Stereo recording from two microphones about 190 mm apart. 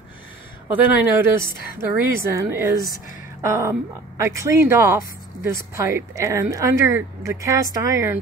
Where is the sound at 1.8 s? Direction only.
15° right (ahead or behind).